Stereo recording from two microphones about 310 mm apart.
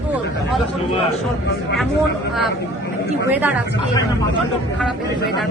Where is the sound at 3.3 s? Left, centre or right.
Centre.